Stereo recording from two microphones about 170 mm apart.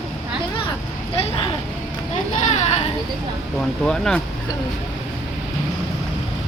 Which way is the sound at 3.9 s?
5° left (ahead or behind).